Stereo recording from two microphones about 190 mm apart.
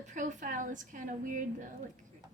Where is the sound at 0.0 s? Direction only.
40° right (ahead or behind).